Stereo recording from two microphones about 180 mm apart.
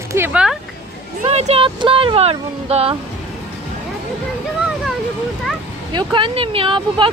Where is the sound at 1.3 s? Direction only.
35° right (ahead or behind).